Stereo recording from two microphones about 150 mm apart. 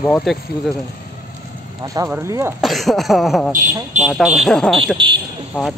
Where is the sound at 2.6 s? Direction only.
Centre (ahead or behind).